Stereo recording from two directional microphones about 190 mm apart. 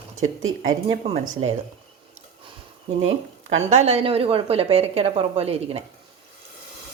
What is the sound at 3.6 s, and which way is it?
A woman's voice, 35° right (ahead or behind).